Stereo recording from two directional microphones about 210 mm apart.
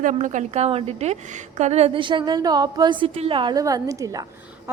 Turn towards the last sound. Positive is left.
turn(degrees=-15)  # may be behind; listen again after turning